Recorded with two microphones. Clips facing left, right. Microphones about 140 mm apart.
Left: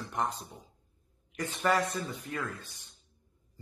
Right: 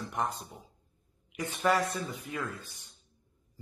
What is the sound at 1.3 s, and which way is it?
A man's voice, 10° right (ahead or behind).